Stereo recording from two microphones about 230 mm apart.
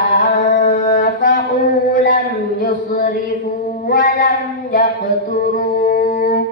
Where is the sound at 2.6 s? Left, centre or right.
Left.